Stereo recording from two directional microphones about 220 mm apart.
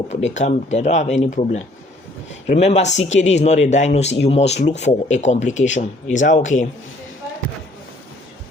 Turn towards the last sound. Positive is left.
turn(degrees=35)  # may be behind; listen again after turning